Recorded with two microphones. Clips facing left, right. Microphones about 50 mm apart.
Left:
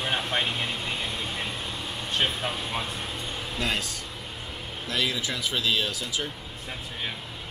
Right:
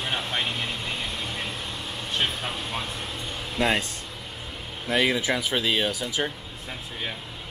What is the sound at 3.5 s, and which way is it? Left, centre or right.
Speech, right.